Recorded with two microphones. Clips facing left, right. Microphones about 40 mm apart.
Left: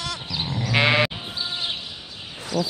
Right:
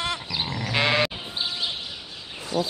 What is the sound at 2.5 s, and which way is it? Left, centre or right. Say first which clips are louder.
Speech: left 1 dB; right.